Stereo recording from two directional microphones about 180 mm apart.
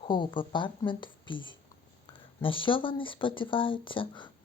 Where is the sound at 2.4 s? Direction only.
30° left (ahead or behind).